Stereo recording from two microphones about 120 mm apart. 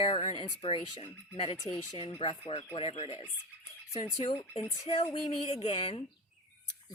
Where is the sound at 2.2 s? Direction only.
45° left (ahead or behind).